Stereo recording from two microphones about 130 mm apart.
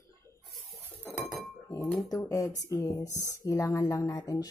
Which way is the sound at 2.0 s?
25° left (ahead or behind).